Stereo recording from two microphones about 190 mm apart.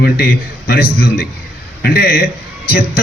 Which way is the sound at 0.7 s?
55° left (ahead or behind).